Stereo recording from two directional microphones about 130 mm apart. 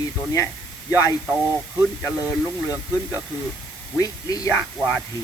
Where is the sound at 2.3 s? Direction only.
15° right (ahead or behind).